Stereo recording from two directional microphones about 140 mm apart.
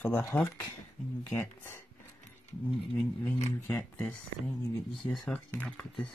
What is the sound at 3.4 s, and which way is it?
Speech, 15° left (ahead or behind).